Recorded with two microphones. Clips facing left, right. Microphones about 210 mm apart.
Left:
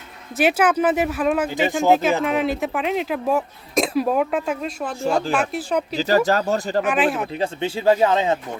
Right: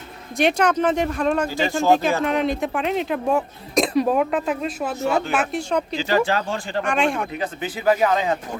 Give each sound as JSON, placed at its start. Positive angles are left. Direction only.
{"t": 0.3, "sound": "speech", "side_deg": 5}
{"t": 1.5, "sound": "speech", "side_deg": 20}
{"t": 1.9, "sound": "speech", "side_deg": 0}
{"t": 6.0, "sound": "speech", "side_deg": 40}
{"t": 6.8, "sound": "speech", "side_deg": 5}
{"t": 7.3, "sound": "speech", "side_deg": 30}